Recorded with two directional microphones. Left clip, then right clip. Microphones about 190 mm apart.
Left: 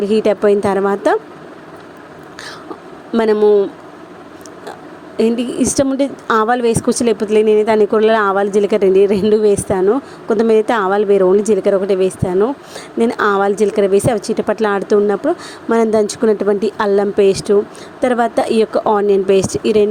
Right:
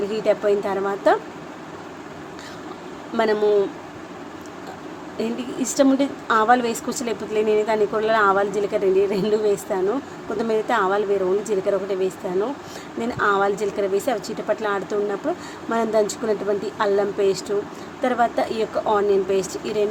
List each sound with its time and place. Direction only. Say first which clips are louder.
0.0 s a woman's voice: left 7 dB; 40° left (ahead or behind)
3.1 s a woman's voice: left 7 dB; 35° left (ahead or behind)
5.1 s a woman's voice: left 12 dB; 40° left (ahead or behind)